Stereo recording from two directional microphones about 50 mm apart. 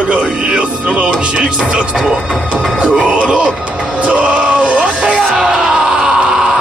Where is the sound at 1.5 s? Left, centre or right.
Centre.